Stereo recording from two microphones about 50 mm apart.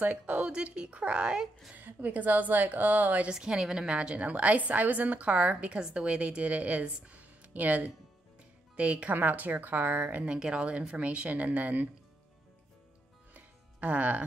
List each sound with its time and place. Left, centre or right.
0.0 s a woman's voice: right
1.8 s a woman's voice: right
3.3 s a woman's voice: centre
9.1 s a woman's voice: right
10.2 s a woman's voice: centre
13.3 s music: right